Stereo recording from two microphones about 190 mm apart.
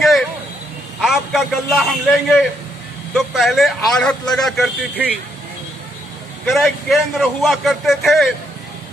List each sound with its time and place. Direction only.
0.0 s vehicle: centre (ahead or behind)
1.0 s a man's voice: centre (ahead or behind)
6.4 s a man's voice: centre (ahead or behind)